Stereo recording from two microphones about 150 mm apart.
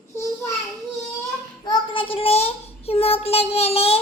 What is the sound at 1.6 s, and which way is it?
Child singing, 35° left (ahead or behind).